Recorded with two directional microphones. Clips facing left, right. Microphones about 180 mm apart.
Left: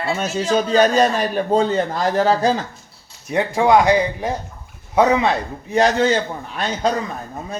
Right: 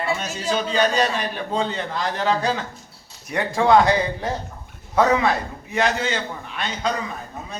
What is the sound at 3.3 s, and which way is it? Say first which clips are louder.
Speech: left 2 dB; 20° left (ahead or behind).